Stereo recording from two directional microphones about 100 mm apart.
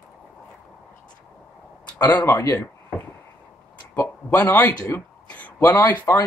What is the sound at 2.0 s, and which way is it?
Speech, 25° left (ahead or behind).